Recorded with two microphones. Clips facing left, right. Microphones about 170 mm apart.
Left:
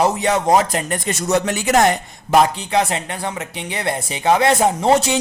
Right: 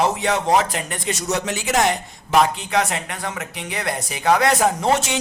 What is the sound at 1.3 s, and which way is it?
Speech, 55° left (ahead or behind).